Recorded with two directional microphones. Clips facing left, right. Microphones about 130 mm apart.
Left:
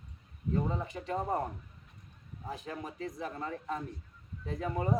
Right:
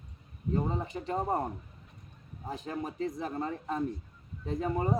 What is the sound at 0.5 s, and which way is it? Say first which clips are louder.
Speech: right 2 dB; 30° right (ahead or behind).